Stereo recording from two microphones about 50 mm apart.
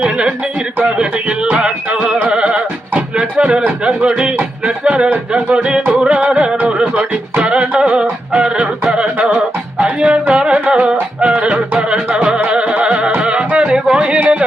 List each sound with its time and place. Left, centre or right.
0.0 s speech: centre
0.9 s music: right
3.8 s speech: centre
6.0 s music: right
13.8 s a sound: centre